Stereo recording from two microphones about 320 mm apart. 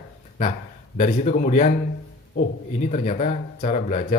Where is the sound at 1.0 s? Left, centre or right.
Left.